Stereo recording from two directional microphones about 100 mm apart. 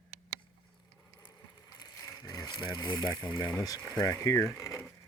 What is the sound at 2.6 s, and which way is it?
Speech, 50° left (ahead or behind).